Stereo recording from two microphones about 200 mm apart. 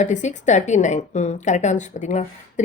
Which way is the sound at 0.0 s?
35° left (ahead or behind).